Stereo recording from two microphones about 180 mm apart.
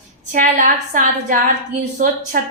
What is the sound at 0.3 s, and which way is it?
A woman's voice, 45° right (ahead or behind).